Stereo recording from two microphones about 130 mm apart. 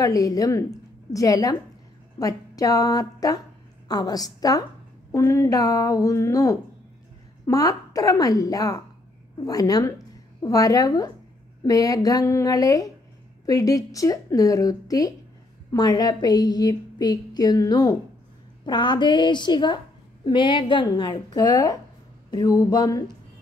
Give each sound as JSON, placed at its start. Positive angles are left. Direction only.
{"t": 0.0, "sound": "a woman's voice", "side_deg": 25}